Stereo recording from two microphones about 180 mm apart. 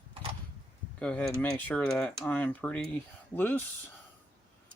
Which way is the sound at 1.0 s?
5° left (ahead or behind).